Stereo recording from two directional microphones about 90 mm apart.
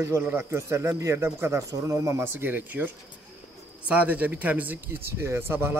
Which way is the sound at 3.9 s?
15° right (ahead or behind).